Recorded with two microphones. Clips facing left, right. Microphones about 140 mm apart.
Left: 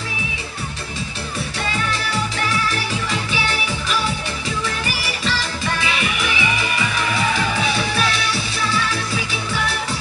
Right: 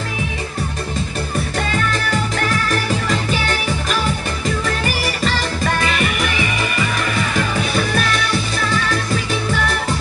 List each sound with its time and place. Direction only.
1.7 s music: 50° right (ahead or behind)